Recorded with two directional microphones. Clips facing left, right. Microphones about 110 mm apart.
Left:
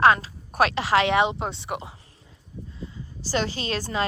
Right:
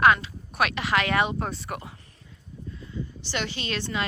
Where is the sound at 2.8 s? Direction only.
35° left (ahead or behind).